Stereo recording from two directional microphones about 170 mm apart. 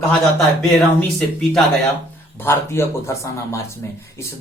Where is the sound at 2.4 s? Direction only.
15° left (ahead or behind).